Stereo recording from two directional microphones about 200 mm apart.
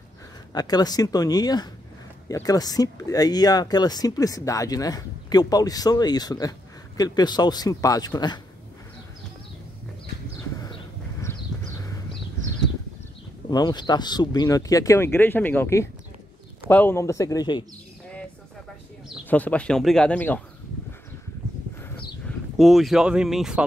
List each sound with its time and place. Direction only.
0.6 s speech: 20° left (ahead or behind)
10.6 s horse: 15° left (ahead or behind)
11.7 s a sound: 15° left (ahead or behind)
13.5 s speech: 20° left (ahead or behind)
19.2 s speech: 10° left (ahead or behind)
21.8 s a sound: 5° left (ahead or behind)